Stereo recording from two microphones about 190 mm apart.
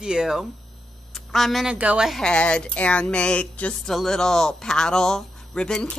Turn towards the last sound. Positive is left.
turn(degrees=5)  # may be behind; listen again after turning